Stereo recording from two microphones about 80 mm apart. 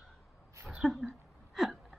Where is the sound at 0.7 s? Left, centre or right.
Centre.